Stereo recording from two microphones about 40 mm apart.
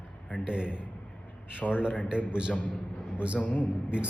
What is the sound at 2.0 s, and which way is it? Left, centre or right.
Speech, right.